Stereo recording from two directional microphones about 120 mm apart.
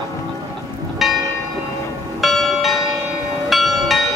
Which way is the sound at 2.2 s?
Centre (ahead or behind).